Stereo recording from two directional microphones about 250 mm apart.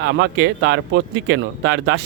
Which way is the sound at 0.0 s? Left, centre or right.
Right.